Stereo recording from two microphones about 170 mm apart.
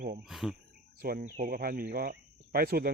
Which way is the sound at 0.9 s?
60° right (ahead or behind).